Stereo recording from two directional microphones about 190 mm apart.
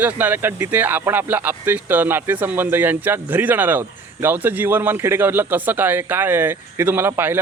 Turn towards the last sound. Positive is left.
turn(degrees=-10)  # may be behind; listen again after turning